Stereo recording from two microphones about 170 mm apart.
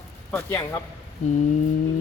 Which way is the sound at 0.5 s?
20° left (ahead or behind).